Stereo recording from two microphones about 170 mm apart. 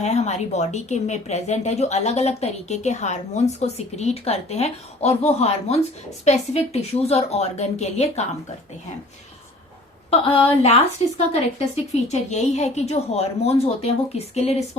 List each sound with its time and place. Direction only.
0.0 s speech: 40° left (ahead or behind)
10.1 s speech: 35° left (ahead or behind)